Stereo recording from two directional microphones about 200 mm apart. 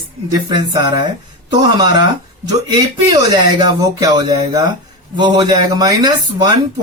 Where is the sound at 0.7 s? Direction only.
20° right (ahead or behind).